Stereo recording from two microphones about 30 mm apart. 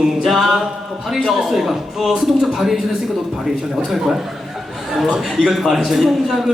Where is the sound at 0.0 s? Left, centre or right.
Centre.